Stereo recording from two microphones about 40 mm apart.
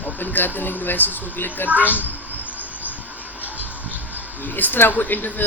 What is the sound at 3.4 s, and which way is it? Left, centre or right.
Toothbrush, right.